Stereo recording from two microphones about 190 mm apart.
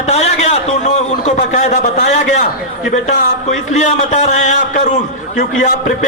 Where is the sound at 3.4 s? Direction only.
35° left (ahead or behind).